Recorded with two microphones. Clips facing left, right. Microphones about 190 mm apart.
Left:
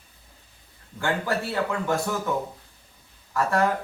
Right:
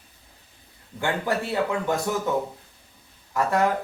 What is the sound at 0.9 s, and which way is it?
A man's voice, 20° right (ahead or behind).